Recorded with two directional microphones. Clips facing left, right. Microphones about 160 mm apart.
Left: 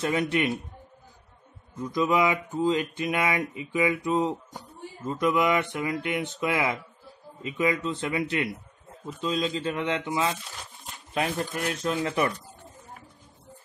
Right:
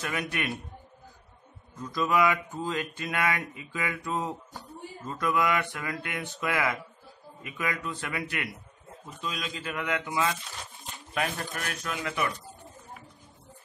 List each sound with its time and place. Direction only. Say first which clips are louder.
0.0 s speech: left 7 dB; 25° left (ahead or behind)
1.8 s speech: left 2 dB; 20° left (ahead or behind); by 12.3 s 35° left (ahead or behind)